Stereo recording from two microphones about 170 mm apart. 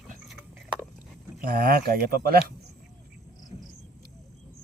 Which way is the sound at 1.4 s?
60° right (ahead or behind).